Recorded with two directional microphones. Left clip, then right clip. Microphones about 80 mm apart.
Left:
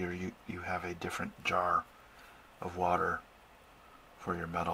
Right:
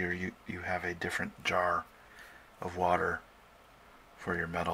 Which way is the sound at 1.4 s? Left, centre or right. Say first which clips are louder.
Even; right.